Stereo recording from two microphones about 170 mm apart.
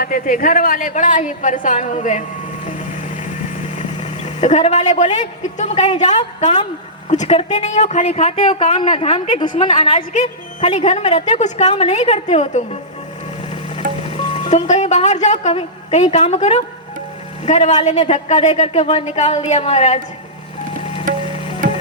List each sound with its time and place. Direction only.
0.0 s a woman's voice: 55° left (ahead or behind)
2.6 s vehicle: 50° left (ahead or behind)
5.5 s a woman's voice: 45° left (ahead or behind)
14.3 s a woman's voice: 45° left (ahead or behind)
21.1 s music: 55° right (ahead or behind)